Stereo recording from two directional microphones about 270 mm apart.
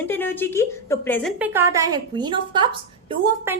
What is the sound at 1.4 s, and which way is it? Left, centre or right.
A woman's voice, centre.